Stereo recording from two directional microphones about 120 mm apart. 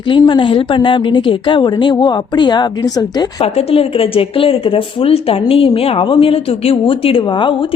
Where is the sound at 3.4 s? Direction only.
55° left (ahead or behind).